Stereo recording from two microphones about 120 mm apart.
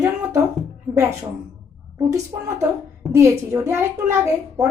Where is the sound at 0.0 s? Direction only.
20° right (ahead or behind).